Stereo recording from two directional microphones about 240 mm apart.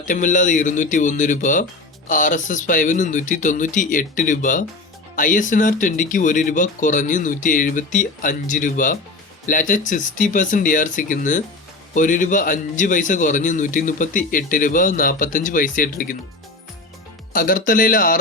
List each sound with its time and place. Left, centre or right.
0.0 s a man's voice: left
17.3 s a man's voice: left